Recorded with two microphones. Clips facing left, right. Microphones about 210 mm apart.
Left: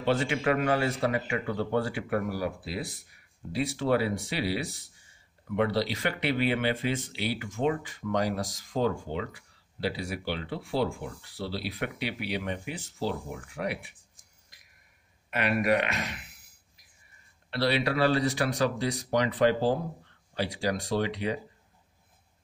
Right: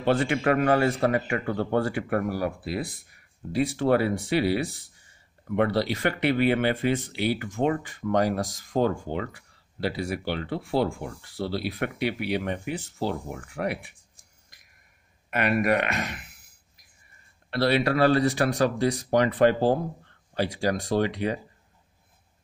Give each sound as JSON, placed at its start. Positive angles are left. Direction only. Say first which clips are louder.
{"t": 0.0, "sound": "speech", "louder": "right 3 dB", "side_deg": -50}
{"t": 15.2, "sound": "speech", "louder": "right 3 dB", "side_deg": -50}
{"t": 17.5, "sound": "speech", "louder": "right 4 dB", "side_deg": -50}